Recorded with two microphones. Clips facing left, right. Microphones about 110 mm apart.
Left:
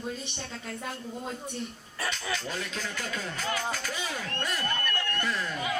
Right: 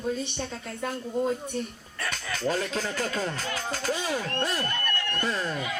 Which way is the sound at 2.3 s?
45° right (ahead or behind).